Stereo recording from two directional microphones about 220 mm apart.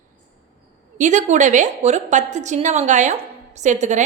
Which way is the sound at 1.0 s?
35° right (ahead or behind).